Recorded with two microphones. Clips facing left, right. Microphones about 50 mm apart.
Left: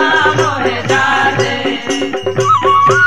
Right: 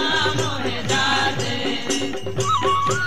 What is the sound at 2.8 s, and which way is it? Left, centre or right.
Music, left.